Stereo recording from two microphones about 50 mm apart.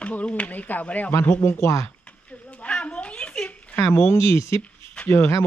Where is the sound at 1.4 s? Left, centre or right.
Left.